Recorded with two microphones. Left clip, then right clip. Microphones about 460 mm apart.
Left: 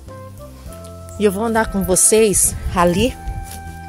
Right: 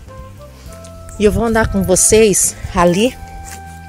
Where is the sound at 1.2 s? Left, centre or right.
Left.